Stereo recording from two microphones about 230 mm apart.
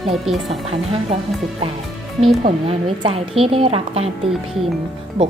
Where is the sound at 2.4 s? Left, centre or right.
Right.